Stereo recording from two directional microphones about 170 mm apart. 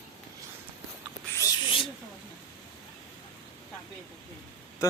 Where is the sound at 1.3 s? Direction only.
20° left (ahead or behind).